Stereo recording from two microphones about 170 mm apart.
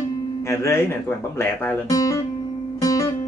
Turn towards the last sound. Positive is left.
turn(degrees=20)  # may be behind; listen again after turning